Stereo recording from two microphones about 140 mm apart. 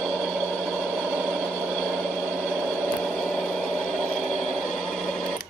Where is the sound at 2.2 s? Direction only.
10° right (ahead or behind).